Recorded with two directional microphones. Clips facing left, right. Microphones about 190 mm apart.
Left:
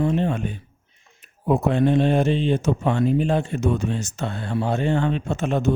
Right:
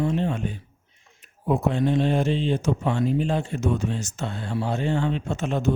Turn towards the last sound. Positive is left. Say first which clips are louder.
# left 3 dB
turn(degrees=60)  # may be behind; listen again after turning